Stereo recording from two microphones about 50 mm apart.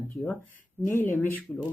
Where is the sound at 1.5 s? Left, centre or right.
Left.